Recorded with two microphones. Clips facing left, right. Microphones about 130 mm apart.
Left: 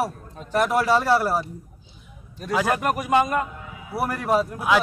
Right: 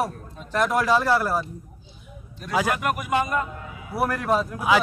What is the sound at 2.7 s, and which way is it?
Speech, 40° left (ahead or behind).